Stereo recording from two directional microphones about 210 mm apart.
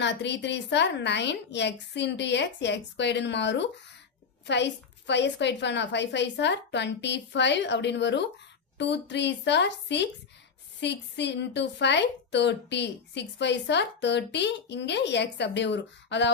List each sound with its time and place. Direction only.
0.0 s a woman's voice: 55° left (ahead or behind)